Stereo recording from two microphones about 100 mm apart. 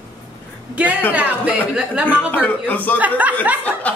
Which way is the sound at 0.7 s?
15° right (ahead or behind).